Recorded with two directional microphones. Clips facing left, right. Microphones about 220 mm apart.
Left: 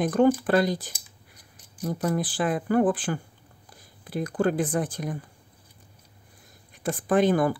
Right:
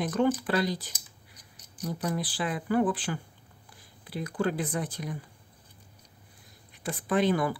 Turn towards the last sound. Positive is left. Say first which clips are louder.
# left 4 dB
turn(degrees=45)  # may be behind; listen again after turning